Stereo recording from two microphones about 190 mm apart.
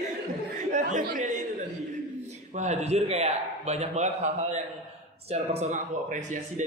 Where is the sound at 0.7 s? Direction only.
40° right (ahead or behind).